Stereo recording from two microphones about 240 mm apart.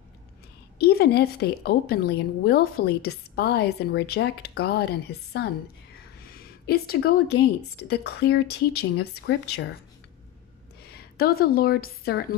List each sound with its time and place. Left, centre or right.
0.7 s a woman's voice: left
6.3 s a sound: left
7.7 s speech: left
10.8 s a woman's voice: left